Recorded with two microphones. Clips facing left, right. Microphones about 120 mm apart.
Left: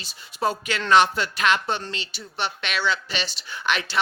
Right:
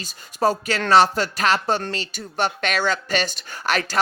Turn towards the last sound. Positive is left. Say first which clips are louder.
# right 3 dB
turn(degrees=-40)  # may be behind; listen again after turning